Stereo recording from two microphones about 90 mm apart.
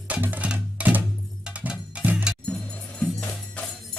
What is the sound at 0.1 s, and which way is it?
Music, 15° right (ahead or behind).